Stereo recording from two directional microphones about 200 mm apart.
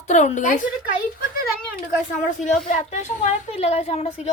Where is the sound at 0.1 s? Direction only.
35° left (ahead or behind).